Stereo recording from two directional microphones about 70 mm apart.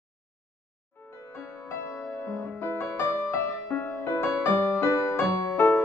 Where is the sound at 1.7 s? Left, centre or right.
Left.